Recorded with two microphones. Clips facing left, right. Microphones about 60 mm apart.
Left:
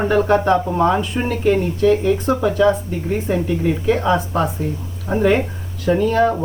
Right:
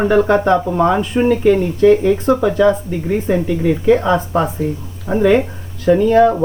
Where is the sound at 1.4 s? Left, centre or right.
Right.